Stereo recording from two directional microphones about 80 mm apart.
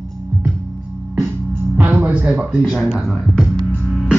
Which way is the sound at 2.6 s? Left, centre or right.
Centre.